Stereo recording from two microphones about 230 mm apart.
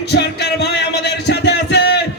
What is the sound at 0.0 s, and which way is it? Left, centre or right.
Music, left.